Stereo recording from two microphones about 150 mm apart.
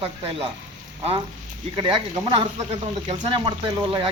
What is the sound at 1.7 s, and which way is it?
Speech, 30° right (ahead or behind).